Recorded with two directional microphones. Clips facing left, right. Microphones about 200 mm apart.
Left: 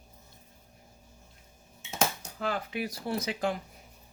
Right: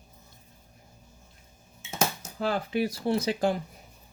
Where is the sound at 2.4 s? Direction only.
30° right (ahead or behind).